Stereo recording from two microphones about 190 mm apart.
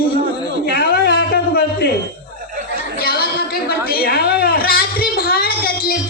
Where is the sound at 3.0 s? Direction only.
55° left (ahead or behind).